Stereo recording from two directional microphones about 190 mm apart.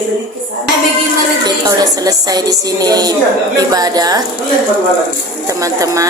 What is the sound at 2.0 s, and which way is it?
A woman's voice, 20° right (ahead or behind).